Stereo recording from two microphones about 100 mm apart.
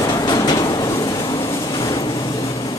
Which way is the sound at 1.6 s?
45° left (ahead or behind).